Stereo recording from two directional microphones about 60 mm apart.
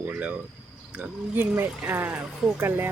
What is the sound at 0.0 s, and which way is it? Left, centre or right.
Speech, right.